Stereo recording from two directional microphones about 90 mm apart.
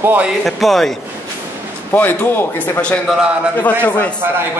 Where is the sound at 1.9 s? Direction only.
25° left (ahead or behind).